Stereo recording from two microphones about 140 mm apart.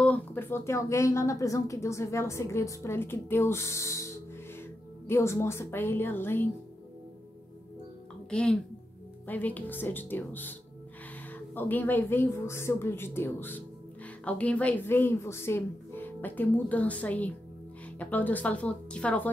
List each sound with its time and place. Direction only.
0.0 s a woman's voice: 10° left (ahead or behind)
8.3 s a woman's voice: 5° left (ahead or behind)
11.5 s a woman's voice: 15° left (ahead or behind)